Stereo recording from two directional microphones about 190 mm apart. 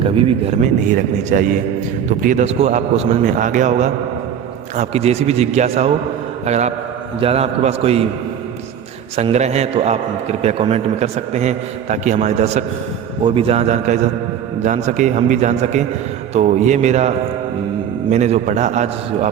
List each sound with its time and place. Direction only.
0.0 s a man's voice: 30° right (ahead or behind)
0.6 s a man's voice: 40° right (ahead or behind)
9.1 s a man's voice: 35° right (ahead or behind)